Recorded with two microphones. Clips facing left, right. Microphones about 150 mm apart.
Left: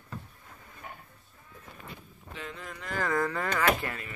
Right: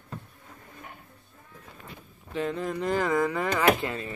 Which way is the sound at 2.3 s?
40° right (ahead or behind).